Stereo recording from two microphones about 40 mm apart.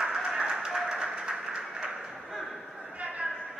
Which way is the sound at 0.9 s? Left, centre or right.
Centre.